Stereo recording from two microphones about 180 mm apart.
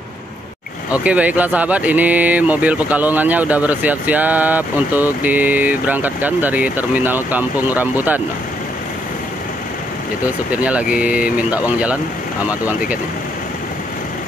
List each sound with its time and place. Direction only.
0.9 s speech: 5° right (ahead or behind)
10.2 s speech: 10° right (ahead or behind)